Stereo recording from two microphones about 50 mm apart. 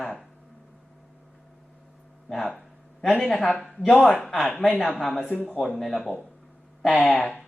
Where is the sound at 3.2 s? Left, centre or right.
Centre.